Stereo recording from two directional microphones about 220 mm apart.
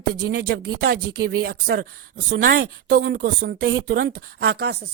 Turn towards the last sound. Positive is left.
turn(degrees=-45)  # may be behind; listen again after turning